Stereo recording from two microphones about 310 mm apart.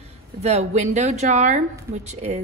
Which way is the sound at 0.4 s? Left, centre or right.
Right.